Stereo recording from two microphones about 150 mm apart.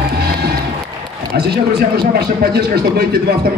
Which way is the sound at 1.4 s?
90° right.